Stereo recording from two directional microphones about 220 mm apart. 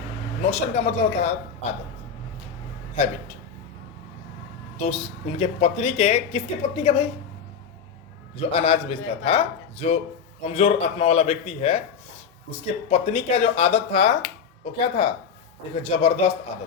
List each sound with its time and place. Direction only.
0.4 s speech: 30° left (ahead or behind)
3.0 s speech: 30° left (ahead or behind)
4.8 s speech: 25° left (ahead or behind)
8.4 s speech: 25° left (ahead or behind)
12.9 s speech: 30° left (ahead or behind)
15.7 s speech: 25° left (ahead or behind)